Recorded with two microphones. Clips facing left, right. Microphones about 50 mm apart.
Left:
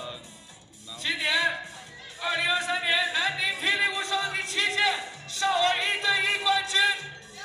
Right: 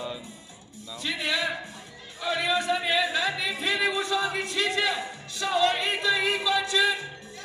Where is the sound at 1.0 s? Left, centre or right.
Centre.